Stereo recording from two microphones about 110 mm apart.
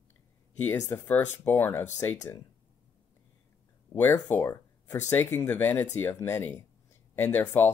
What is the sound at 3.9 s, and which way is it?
Speech, 15° left (ahead or behind).